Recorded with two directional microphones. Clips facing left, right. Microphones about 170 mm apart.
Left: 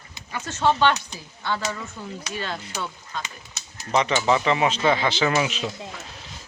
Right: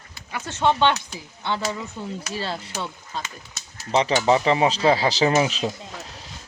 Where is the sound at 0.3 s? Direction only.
15° right (ahead or behind).